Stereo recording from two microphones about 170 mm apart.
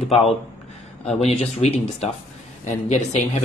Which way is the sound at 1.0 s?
40° left (ahead or behind).